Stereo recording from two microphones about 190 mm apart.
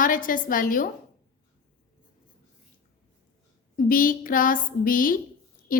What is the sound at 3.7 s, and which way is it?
A woman's voice, 45° left (ahead or behind).